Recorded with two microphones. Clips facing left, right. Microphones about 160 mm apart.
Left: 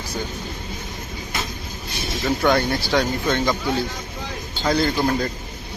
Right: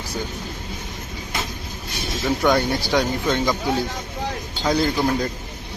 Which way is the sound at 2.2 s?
10° right (ahead or behind).